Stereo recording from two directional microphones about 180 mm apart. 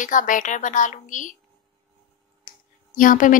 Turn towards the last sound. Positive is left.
turn(degrees=45)  # may be behind; listen again after turning